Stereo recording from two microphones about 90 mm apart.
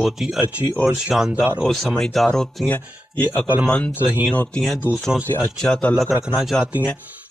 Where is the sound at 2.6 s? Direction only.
20° left (ahead or behind).